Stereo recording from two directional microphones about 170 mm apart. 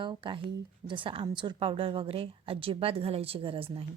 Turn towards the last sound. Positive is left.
turn(degrees=-30)  # may be behind; listen again after turning